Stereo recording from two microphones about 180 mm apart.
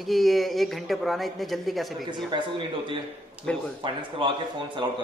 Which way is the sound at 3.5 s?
5° left (ahead or behind).